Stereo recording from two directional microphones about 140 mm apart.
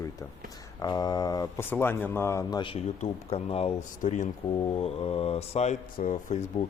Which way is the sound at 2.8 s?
50° left (ahead or behind).